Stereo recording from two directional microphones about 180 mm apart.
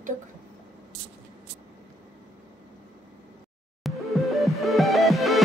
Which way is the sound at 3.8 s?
Centre (ahead or behind).